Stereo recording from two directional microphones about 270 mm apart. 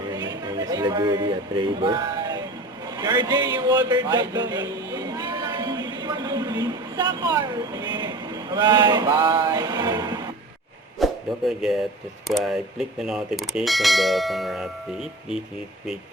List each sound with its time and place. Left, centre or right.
0.1 s a sound: centre
3.0 s a man's voice: centre
11.0 s speech: centre
12.3 s bell: centre